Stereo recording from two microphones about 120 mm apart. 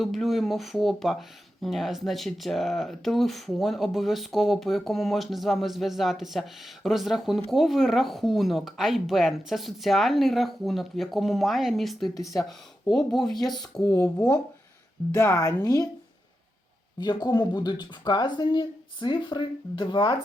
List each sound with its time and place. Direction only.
0.0 s speech: centre (ahead or behind)
12.1 s a woman's voice: 30° left (ahead or behind)
12.5 s speech: 5° left (ahead or behind)
13.8 s a woman's voice: 25° left (ahead or behind)
15.1 s a woman's voice: 20° left (ahead or behind)
17.0 s speech: 35° left (ahead or behind)